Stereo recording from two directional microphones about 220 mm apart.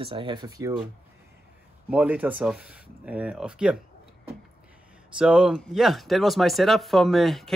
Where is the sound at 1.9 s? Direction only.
5° right (ahead or behind).